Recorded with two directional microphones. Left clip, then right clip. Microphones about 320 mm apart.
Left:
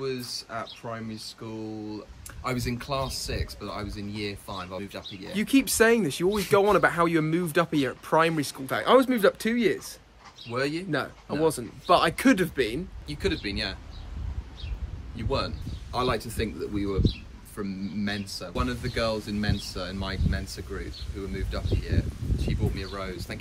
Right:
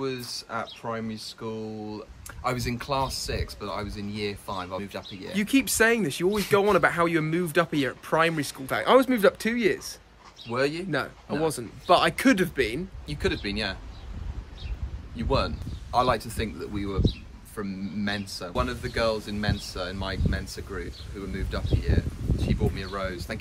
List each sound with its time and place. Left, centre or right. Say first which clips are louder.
0.0 s speech: even; centre
15.1 s speech: right 3 dB; centre